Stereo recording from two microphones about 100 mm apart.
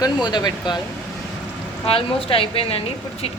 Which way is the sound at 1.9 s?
65° left (ahead or behind).